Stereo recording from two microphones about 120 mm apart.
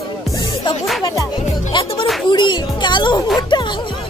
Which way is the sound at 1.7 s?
45° left (ahead or behind).